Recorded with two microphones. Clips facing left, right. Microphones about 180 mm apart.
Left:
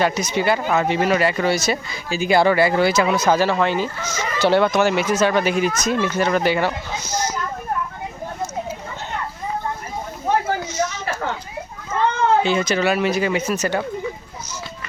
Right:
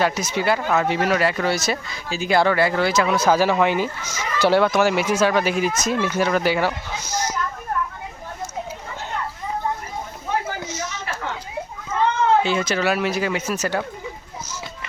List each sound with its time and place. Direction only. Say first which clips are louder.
0.0 s speech: left 2 dB; 5° right (ahead or behind)
10.8 s a sound: left 8 dB; 45° left (ahead or behind)
12.4 s speech: left 2 dB; 5° right (ahead or behind)